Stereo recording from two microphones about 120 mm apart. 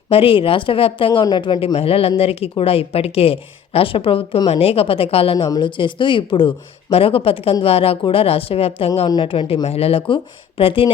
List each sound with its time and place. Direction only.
0.1 s speech: 50° left (ahead or behind)